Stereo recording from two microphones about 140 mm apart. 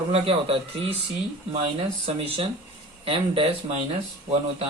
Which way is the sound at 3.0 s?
40° right (ahead or behind).